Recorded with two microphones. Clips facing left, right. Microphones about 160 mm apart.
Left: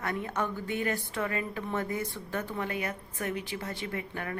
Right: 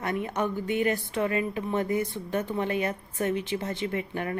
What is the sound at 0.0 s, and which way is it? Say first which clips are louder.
Speech: right 4 dB; 20° right (ahead or behind).